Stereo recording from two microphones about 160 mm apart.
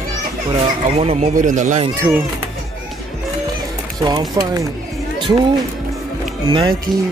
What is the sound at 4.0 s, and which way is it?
Speech, 25° right (ahead or behind).